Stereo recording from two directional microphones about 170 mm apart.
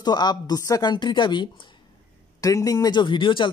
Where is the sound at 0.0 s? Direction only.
25° left (ahead or behind).